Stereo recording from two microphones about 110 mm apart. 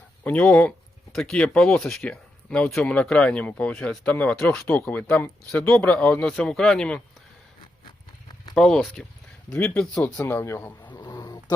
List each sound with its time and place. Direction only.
0.3 s speech: 10° left (ahead or behind)
4.6 s speech: 20° left (ahead or behind)
7.6 s a sound: 50° left (ahead or behind)
8.5 s speech: 5° left (ahead or behind)
10.2 s speech: 25° left (ahead or behind)
11.1 s a sound: 35° left (ahead or behind)